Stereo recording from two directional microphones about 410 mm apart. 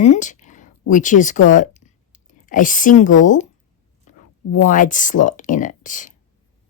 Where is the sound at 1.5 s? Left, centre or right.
Centre.